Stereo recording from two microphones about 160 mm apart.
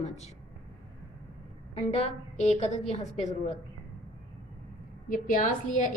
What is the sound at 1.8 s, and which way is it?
A woman's voice, 45° left (ahead or behind).